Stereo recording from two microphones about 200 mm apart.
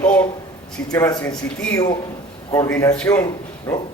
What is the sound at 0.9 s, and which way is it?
Speech, 15° left (ahead or behind).